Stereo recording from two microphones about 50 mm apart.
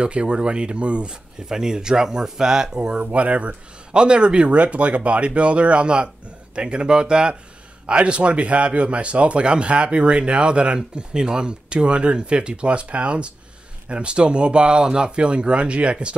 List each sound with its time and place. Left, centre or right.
0.0 s speech: right